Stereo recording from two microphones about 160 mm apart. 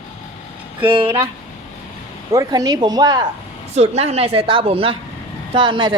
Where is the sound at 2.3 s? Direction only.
20° right (ahead or behind).